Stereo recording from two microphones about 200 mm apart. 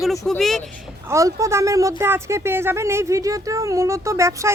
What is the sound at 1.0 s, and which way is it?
Speech, 15° right (ahead or behind).